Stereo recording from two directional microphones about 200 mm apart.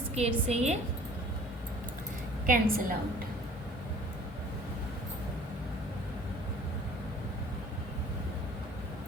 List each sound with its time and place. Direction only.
0.2 s a woman's voice: 30° right (ahead or behind)
2.5 s a woman's voice: 45° right (ahead or behind)